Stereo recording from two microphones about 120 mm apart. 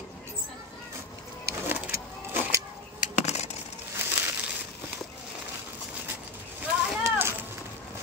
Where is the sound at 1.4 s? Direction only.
15° right (ahead or behind).